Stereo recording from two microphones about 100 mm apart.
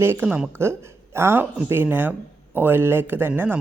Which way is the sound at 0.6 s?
25° right (ahead or behind).